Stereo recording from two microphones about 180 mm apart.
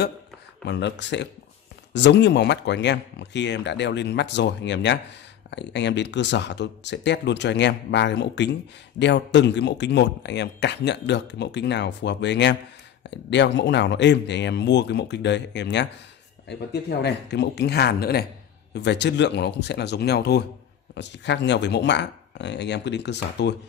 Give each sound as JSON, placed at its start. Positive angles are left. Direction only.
{"t": 0.7, "sound": "speech", "side_deg": 75}
{"t": 17.0, "sound": "speech", "side_deg": 70}
{"t": 18.7, "sound": "speech", "side_deg": 70}
{"t": 20.9, "sound": "speech", "side_deg": 75}